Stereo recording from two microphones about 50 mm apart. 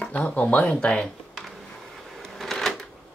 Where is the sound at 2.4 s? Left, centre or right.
Centre.